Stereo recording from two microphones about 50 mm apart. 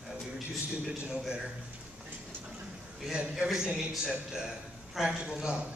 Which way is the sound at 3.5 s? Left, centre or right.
Centre.